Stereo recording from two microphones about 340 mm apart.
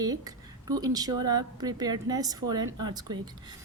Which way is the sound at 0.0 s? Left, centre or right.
Centre.